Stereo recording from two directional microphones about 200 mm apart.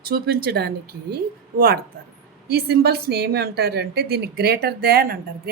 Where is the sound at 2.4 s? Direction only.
50° right (ahead or behind).